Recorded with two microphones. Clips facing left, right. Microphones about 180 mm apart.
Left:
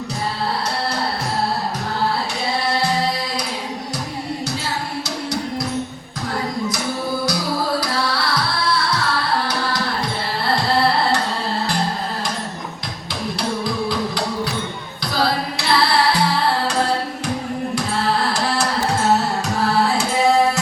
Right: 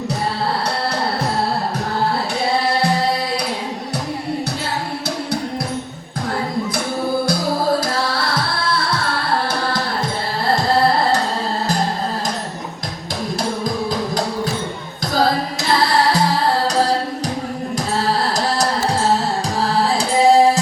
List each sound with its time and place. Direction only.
7.3 s music: 50° right (ahead or behind)
10.4 s carnatic music: 45° right (ahead or behind)
15.1 s music: 45° right (ahead or behind)
20.0 s music: 35° right (ahead or behind)